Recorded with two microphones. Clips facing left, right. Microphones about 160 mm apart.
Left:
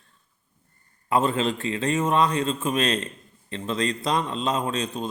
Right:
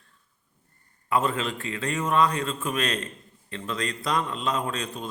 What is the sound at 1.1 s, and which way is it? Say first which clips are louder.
A man's voice: left 3 dB; 25° left (ahead or behind).